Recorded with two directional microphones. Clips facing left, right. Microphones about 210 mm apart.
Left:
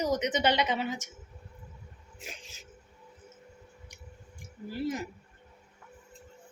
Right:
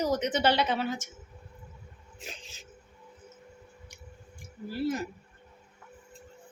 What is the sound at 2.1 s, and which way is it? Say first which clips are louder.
Speech: right 1 dB; 10° left (ahead or behind).